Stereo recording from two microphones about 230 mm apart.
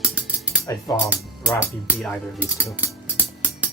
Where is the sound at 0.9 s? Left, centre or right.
Centre.